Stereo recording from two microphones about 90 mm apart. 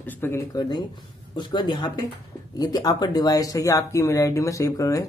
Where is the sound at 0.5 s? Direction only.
50° left (ahead or behind).